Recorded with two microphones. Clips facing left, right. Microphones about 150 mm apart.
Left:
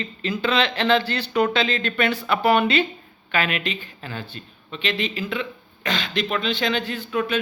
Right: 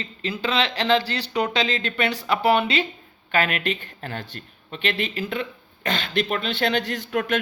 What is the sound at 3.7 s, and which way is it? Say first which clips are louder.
Speech: right 2 dB; 65° right (ahead or behind).